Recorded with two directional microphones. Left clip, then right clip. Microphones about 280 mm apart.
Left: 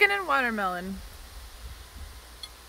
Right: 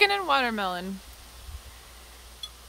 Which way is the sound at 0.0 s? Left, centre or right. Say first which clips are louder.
Right 1 dB; centre.